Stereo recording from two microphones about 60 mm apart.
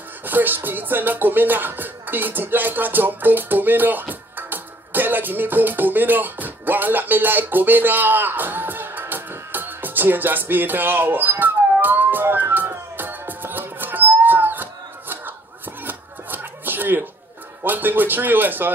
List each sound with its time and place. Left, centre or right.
0.2 s music: right
15.8 s a sound: right
17.6 s a man's voice: right